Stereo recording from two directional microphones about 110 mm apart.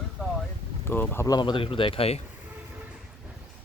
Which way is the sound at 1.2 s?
45° left (ahead or behind).